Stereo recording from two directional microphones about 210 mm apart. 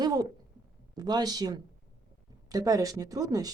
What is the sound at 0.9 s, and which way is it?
Speech, 20° right (ahead or behind).